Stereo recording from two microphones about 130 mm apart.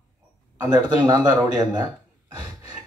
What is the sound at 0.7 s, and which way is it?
Speech, 30° right (ahead or behind).